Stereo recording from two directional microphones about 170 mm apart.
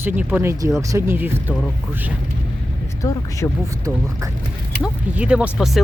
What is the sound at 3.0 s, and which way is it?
Speech, 20° left (ahead or behind).